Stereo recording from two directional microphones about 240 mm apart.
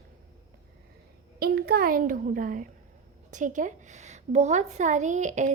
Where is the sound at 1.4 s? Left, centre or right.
Right.